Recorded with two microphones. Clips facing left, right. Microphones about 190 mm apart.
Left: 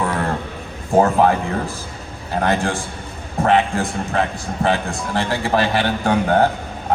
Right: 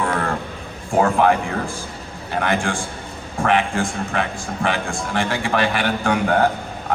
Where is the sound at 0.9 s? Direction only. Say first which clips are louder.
Left 2 dB; 40° left (ahead or behind).